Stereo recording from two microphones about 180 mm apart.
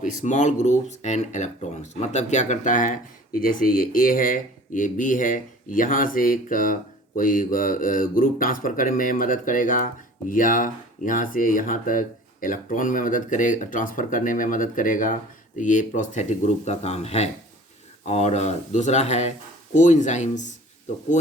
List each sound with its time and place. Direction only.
0.0 s speech: 45° left (ahead or behind)